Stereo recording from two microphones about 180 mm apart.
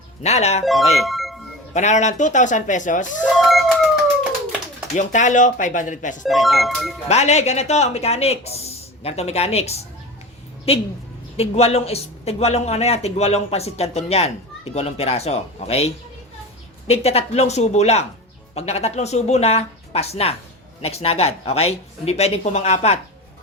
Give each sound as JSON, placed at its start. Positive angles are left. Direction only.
{"t": 0.2, "sound": "speech", "side_deg": 35}
{"t": 0.6, "sound": "speech", "side_deg": 0}
{"t": 1.7, "sound": "speech", "side_deg": 40}
{"t": 3.2, "sound": "music", "side_deg": 0}
{"t": 4.9, "sound": "speech", "side_deg": 45}
{"t": 6.2, "sound": "speech", "side_deg": 0}
{"t": 7.1, "sound": "speech", "side_deg": 40}